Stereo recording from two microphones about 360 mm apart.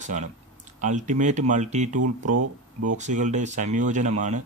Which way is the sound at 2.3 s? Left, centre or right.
Right.